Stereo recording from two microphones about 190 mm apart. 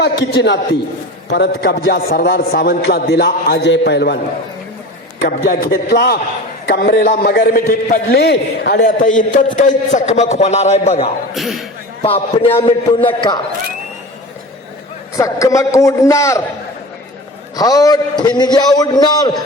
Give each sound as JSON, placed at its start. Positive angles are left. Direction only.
{"t": 0.0, "sound": "a man's voice", "side_deg": 60}
{"t": 5.2, "sound": "a man's voice", "side_deg": 55}
{"t": 6.8, "sound": "a man's voice", "side_deg": 45}
{"t": 8.8, "sound": "a man's voice", "side_deg": 45}
{"t": 11.3, "sound": "speech", "side_deg": 0}
{"t": 12.0, "sound": "a man's voice", "side_deg": 30}
{"t": 15.1, "sound": "a man's voice", "side_deg": 15}
{"t": 17.6, "sound": "a man's voice", "side_deg": 20}